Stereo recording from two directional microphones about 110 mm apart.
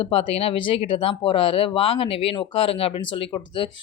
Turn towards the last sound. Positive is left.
turn(degrees=50)  # may be behind; listen again after turning